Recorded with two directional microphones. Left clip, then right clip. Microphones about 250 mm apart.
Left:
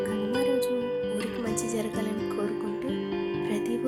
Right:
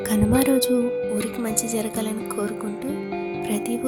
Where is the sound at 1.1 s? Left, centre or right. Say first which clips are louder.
Right 4 dB; centre.